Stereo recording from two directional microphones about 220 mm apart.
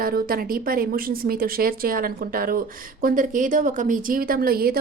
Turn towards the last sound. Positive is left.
turn(degrees=-45)  # may be behind; listen again after turning